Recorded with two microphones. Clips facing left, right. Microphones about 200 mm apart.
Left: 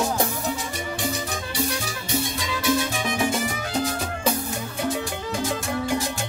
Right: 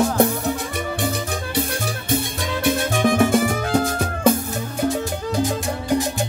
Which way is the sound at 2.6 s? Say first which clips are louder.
Right 5 dB; 55° right (ahead or behind).